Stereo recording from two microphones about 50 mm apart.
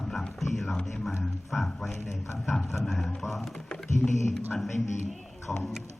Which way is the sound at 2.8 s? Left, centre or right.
Centre.